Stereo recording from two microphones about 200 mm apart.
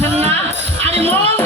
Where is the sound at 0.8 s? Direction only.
30° right (ahead or behind).